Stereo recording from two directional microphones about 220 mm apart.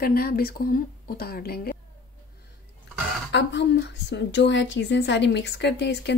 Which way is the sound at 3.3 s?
55° left (ahead or behind).